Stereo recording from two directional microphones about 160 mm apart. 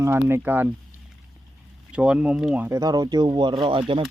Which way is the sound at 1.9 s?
5° right (ahead or behind).